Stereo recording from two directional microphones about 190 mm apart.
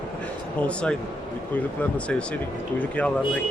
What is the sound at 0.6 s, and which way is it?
Speech, 5° left (ahead or behind).